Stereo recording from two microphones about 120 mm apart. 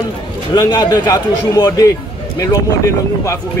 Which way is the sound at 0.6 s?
35° left (ahead or behind).